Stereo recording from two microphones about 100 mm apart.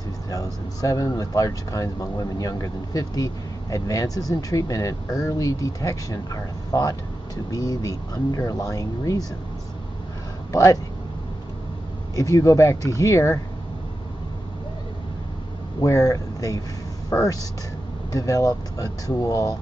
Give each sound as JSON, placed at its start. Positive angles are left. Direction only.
{"t": 0.3, "sound": "speech", "side_deg": 35}
{"t": 10.5, "sound": "speech", "side_deg": 35}
{"t": 12.2, "sound": "speech", "side_deg": 35}
{"t": 15.8, "sound": "speech", "side_deg": 30}